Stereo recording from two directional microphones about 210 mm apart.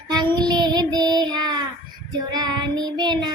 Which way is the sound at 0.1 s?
20° right (ahead or behind).